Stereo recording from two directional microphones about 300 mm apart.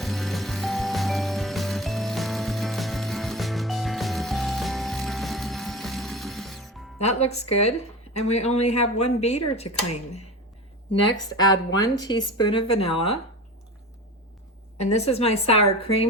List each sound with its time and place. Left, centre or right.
0.0 s music: centre
7.0 s a woman's voice: left
11.0 s a woman's voice: centre
14.8 s a woman's voice: left